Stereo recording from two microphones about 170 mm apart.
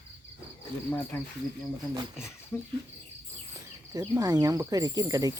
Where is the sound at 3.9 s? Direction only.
20° right (ahead or behind).